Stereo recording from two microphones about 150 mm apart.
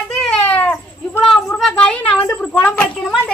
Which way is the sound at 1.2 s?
Centre (ahead or behind).